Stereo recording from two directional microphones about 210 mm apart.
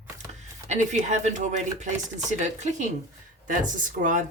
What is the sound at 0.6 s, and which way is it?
Speech, 35° right (ahead or behind).